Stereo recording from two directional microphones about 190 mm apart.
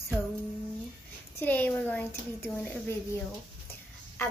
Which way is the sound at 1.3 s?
10° left (ahead or behind).